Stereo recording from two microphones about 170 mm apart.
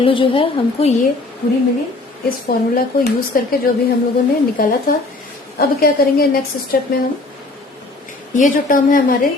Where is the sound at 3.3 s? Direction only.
55° left (ahead or behind).